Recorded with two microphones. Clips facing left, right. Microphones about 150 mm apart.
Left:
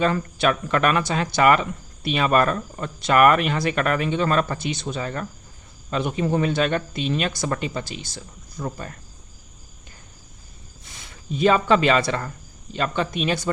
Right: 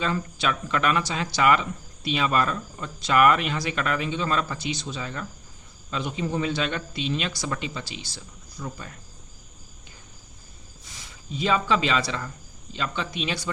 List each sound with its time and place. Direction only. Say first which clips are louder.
0.0 s speech: left 6 dB; 55° left (ahead or behind)
11.3 s a man's voice: left 6 dB; 55° left (ahead or behind)